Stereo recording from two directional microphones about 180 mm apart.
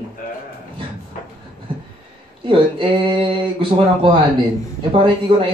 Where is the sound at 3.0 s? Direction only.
25° right (ahead or behind).